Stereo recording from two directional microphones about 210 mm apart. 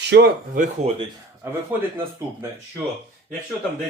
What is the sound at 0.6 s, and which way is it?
Speech, 30° right (ahead or behind).